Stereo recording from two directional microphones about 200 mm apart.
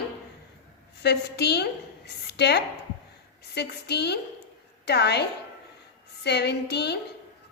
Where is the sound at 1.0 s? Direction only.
55° left (ahead or behind).